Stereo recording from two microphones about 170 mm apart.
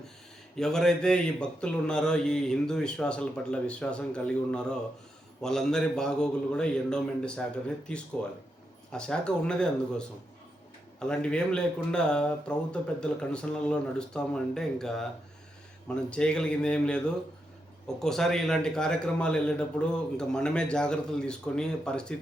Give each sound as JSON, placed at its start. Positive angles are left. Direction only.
{"t": 0.5, "sound": "speech", "side_deg": 5}
{"t": 11.0, "sound": "speech", "side_deg": 5}
{"t": 16.0, "sound": "speech", "side_deg": 5}